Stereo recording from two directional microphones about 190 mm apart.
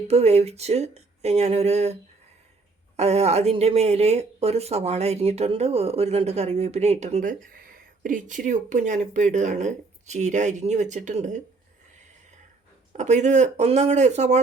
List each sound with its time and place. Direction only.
0.1 s speech: 35° right (ahead or behind)
13.0 s speech: 35° right (ahead or behind)